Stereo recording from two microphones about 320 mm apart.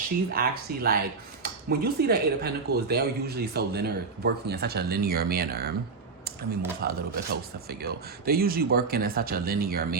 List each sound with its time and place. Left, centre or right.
0.3 s speech: right
6.8 s speech: right